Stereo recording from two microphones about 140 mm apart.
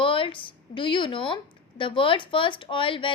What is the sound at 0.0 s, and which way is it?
Speech, 40° left (ahead or behind).